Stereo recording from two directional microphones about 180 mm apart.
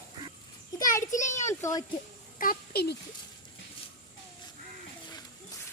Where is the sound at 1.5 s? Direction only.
15° left (ahead or behind).